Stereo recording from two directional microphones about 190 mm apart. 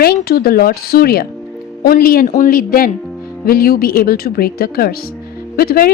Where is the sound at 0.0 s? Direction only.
55° left (ahead or behind).